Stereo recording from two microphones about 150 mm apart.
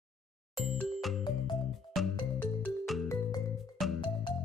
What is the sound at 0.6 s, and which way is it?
Music, centre (ahead or behind).